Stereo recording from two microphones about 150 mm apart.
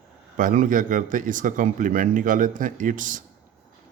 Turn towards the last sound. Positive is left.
turn(degrees=-60)  # may be behind; listen again after turning